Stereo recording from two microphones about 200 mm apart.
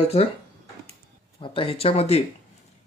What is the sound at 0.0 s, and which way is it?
Speech, 30° left (ahead or behind).